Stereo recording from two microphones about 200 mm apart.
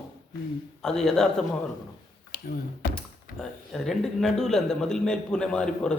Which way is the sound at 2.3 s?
50° left (ahead or behind).